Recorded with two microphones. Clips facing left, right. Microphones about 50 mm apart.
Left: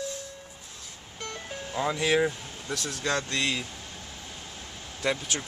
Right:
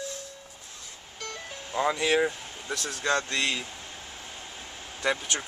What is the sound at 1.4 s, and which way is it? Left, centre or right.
Ice cream truck, centre.